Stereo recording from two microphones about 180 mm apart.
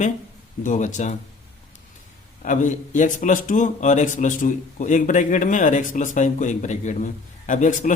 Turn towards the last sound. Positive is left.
turn(degrees=45)  # may be behind; listen again after turning